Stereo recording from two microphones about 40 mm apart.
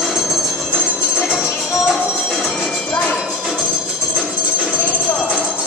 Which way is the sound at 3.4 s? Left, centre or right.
Centre.